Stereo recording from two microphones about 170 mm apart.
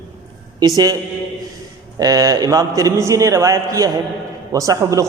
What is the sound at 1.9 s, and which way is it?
A man's voice, 20° right (ahead or behind).